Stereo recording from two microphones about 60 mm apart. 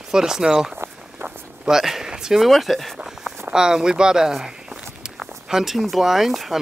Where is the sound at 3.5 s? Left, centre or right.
Centre.